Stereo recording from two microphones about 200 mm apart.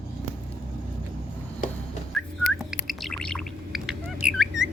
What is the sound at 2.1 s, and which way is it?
Whistling, centre (ahead or behind).